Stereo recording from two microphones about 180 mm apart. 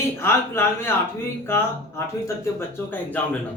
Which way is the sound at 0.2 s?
15° left (ahead or behind).